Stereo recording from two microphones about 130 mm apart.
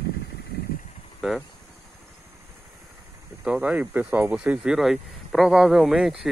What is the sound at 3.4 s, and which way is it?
Speech, 10° right (ahead or behind).